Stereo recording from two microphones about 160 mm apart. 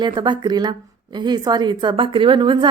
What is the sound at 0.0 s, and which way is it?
Speech, 30° right (ahead or behind).